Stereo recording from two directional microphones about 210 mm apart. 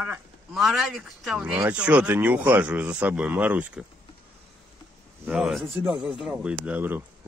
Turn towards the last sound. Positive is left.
turn(degrees=-10)  # may be behind; listen again after turning